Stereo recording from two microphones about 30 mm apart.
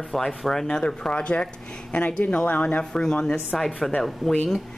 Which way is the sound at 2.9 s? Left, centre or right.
Left.